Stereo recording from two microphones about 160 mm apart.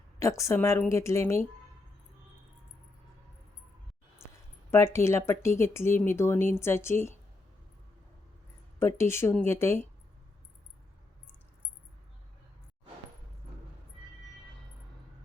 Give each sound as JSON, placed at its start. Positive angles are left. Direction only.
{"t": 0.2, "sound": "speech", "side_deg": 20}
{"t": 4.2, "sound": "a sound", "side_deg": 15}
{"t": 4.7, "sound": "speech", "side_deg": 15}
{"t": 9.0, "sound": "speech", "side_deg": 15}